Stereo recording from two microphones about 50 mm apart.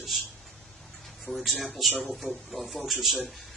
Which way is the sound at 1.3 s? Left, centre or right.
Centre.